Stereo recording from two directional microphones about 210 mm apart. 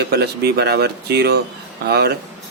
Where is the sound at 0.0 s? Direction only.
50° right (ahead or behind).